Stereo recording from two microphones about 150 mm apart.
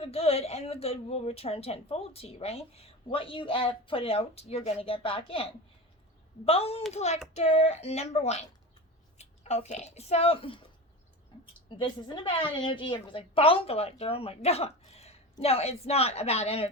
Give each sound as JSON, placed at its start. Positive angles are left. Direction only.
{"t": 0.0, "sound": "a woman's voice", "side_deg": 40}
{"t": 11.8, "sound": "a woman's voice", "side_deg": 35}